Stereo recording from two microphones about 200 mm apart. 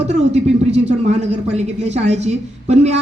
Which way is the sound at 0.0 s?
35° right (ahead or behind).